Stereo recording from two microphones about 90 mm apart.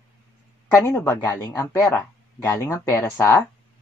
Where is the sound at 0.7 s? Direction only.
30° left (ahead or behind).